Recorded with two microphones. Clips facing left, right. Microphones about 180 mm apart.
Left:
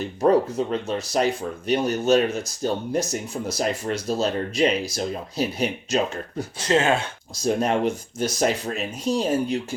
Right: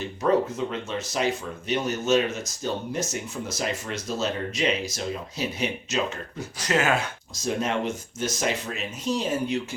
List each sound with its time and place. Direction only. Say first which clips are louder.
0.2 s speech: left 4 dB; 35° left (ahead or behind)